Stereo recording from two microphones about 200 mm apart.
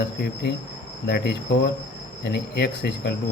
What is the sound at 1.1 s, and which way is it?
Speech, 55° left (ahead or behind).